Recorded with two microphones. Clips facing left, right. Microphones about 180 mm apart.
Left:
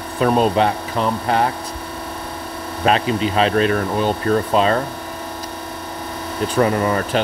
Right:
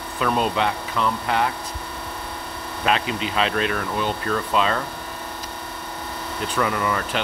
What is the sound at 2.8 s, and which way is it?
Speech, 35° left (ahead or behind).